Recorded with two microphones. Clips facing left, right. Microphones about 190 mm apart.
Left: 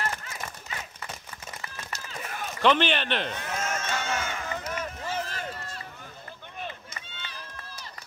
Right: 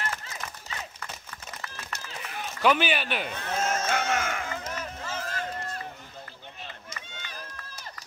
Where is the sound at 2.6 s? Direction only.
10° right (ahead or behind).